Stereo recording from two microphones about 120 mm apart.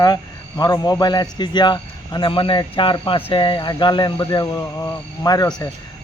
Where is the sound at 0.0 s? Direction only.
35° left (ahead or behind).